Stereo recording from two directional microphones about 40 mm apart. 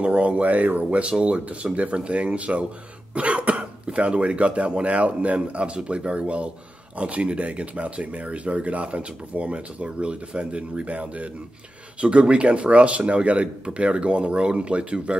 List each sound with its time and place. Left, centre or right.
0.0 s speech: right